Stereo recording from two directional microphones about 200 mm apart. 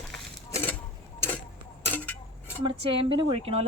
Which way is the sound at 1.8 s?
10° left (ahead or behind).